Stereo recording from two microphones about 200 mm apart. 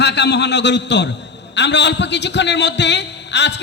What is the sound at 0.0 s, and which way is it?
A man's voice, 60° left (ahead or behind).